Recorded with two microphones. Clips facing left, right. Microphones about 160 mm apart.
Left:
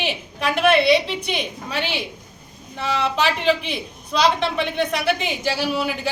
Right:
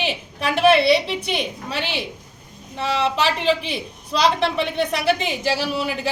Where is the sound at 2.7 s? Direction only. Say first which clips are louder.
Right 1 dB; 30° right (ahead or behind).